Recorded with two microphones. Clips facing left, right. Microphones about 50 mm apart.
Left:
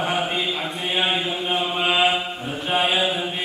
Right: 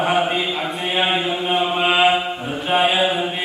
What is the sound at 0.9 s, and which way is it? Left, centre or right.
Mantra, centre.